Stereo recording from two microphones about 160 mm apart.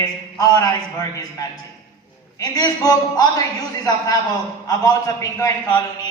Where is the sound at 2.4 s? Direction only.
25° left (ahead or behind).